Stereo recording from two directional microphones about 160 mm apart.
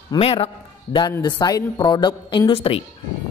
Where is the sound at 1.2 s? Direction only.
25° left (ahead or behind).